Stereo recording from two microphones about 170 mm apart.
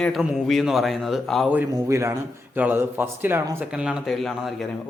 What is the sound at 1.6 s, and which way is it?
A man's voice, 15° right (ahead or behind).